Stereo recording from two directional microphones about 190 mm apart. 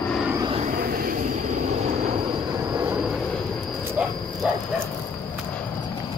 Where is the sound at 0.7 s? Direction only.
50° right (ahead or behind); by 2.2 s 35° right (ahead or behind).